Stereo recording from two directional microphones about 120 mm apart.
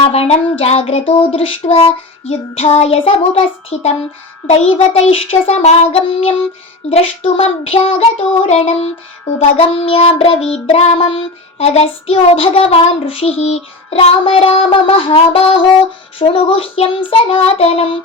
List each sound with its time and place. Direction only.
0.0 s child singing: 55° left (ahead or behind)
5.1 s child singing: 55° left (ahead or behind)